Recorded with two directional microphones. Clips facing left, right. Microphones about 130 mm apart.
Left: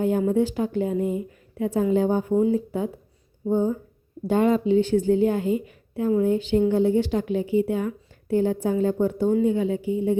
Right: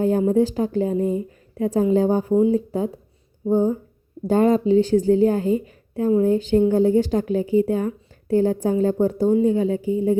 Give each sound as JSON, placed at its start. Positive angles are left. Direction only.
{"t": 0.0, "sound": "a woman's voice", "side_deg": -35}